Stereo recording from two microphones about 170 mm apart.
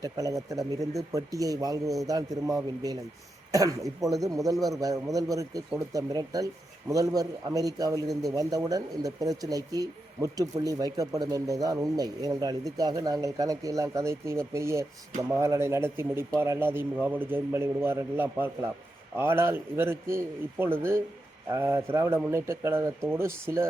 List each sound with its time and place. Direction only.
0.0 s a man's voice: 20° right (ahead or behind)